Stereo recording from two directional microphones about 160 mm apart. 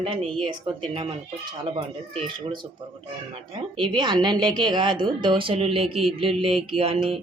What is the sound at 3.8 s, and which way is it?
Speech, 30° right (ahead or behind).